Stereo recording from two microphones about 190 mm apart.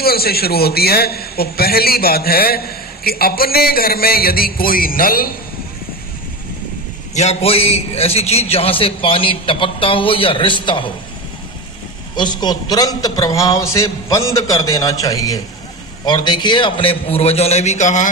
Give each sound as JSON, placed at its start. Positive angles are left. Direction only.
{"t": 0.0, "sound": "a man's voice", "side_deg": 55}
{"t": 7.1, "sound": "a man's voice", "side_deg": 35}
{"t": 12.1, "sound": "a man's voice", "side_deg": 20}